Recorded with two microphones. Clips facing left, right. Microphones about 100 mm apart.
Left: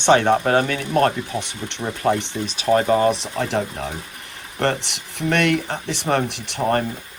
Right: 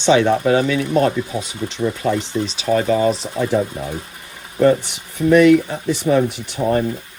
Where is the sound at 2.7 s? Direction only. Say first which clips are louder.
Even; 40° left (ahead or behind).